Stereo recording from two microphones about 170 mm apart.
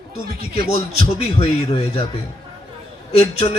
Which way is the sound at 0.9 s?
35° left (ahead or behind).